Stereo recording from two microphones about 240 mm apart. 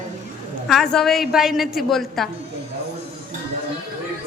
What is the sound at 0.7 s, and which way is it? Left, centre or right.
A woman's voice, centre.